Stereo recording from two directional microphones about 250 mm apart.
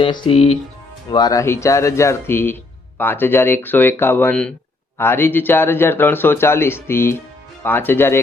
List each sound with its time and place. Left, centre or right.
0.0 s a man's voice: left